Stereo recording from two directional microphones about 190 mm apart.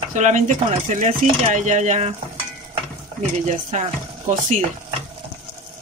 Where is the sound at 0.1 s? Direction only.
40° right (ahead or behind).